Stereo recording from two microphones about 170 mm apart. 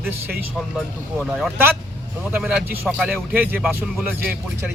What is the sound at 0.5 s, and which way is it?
A man's voice, centre (ahead or behind).